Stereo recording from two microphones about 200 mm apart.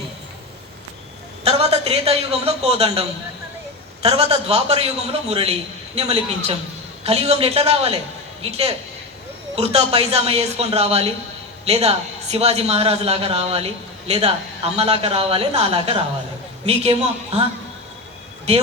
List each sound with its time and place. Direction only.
1.5 s a man's voice: 30° right (ahead or behind)